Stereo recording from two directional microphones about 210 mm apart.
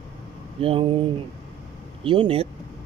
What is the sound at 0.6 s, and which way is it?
Speech, 25° right (ahead or behind).